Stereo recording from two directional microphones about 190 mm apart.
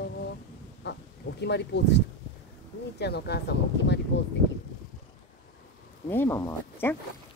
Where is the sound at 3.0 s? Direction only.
60° left (ahead or behind).